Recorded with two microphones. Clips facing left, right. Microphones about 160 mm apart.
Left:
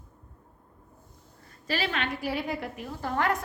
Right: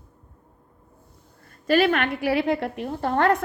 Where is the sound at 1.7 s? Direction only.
55° right (ahead or behind).